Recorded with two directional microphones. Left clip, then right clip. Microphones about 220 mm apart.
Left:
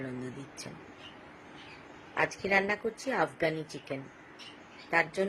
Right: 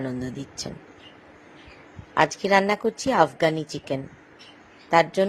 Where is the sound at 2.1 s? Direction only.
35° right (ahead or behind).